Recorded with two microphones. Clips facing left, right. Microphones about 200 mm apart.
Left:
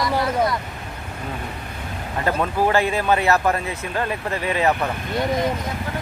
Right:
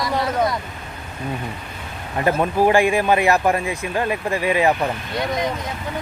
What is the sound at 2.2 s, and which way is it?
Speech, 15° right (ahead or behind).